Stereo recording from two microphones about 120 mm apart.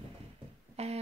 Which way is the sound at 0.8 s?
60° right (ahead or behind).